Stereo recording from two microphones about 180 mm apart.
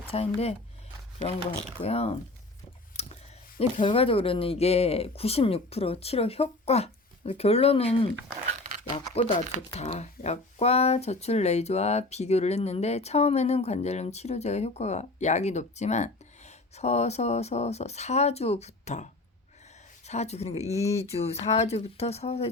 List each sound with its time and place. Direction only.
0.1 s speech: 35° left (ahead or behind)
2.9 s a sound: 35° left (ahead or behind)
3.6 s speech: 30° left (ahead or behind)
20.1 s speech: 35° left (ahead or behind)